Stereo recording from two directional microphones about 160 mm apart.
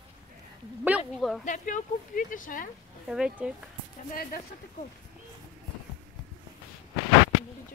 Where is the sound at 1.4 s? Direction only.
55° left (ahead or behind).